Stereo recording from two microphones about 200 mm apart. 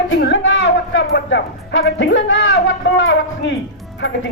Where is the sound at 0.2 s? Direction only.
65° left (ahead or behind).